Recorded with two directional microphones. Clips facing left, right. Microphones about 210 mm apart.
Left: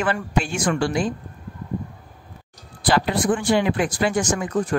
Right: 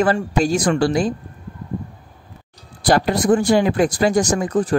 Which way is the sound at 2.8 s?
40° right (ahead or behind).